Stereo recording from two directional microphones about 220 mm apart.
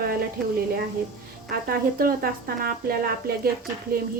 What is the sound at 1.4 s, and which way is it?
A woman's voice, 45° right (ahead or behind).